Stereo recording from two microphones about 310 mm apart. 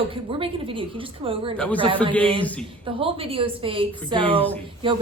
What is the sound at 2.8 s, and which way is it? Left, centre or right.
A woman's voice, centre.